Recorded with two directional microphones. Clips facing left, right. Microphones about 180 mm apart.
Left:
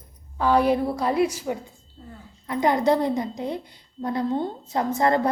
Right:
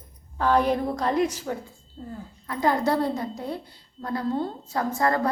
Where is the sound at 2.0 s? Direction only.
45° right (ahead or behind).